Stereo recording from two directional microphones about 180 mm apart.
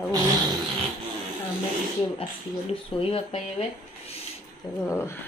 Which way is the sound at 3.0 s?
30° left (ahead or behind).